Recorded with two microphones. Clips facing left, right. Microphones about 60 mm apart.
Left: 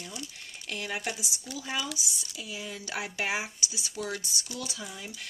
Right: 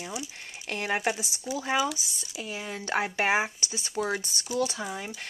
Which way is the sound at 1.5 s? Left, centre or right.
Centre.